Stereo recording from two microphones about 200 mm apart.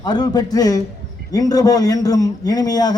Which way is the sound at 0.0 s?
20° left (ahead or behind).